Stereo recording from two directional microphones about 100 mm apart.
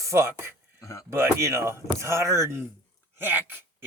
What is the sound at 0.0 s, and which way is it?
Speech, 25° right (ahead or behind).